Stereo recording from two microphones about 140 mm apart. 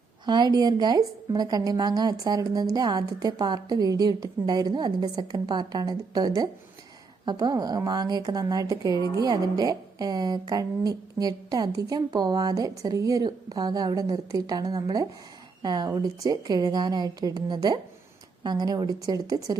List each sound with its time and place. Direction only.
0.3 s a woman's voice: 30° right (ahead or behind)